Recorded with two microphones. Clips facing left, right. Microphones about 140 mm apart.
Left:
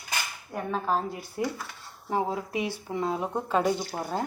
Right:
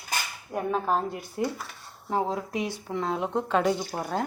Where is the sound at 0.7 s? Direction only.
Centre (ahead or behind).